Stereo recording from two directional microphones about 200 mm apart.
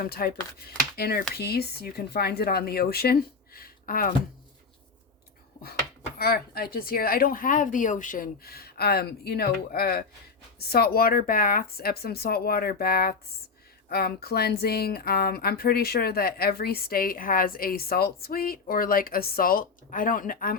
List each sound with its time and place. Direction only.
0.0 s speech: 50° left (ahead or behind)
6.1 s speech: 50° left (ahead or behind)